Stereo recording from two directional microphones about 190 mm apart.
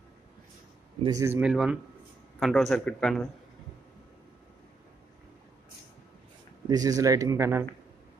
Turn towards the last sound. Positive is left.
turn(degrees=-15)  # may be behind; listen again after turning